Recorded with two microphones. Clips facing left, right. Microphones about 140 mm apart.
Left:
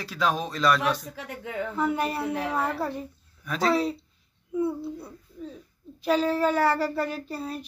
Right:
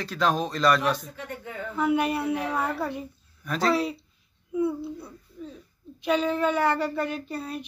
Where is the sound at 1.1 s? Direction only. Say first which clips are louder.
Left 2 dB; 90° left.